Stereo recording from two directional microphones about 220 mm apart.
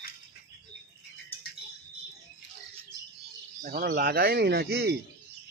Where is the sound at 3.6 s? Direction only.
45° right (ahead or behind).